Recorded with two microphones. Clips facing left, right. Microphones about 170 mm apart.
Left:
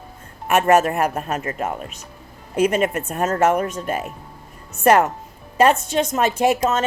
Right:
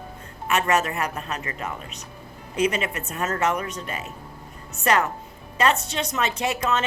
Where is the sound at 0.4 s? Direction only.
55° left (ahead or behind).